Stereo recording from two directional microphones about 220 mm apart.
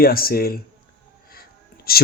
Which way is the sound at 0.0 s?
40° left (ahead or behind).